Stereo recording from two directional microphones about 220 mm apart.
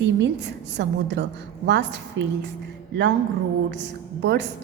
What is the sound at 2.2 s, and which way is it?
Speech, 55° right (ahead or behind).